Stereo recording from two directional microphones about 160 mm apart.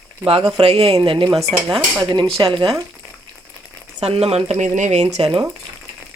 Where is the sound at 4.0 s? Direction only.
40° right (ahead or behind).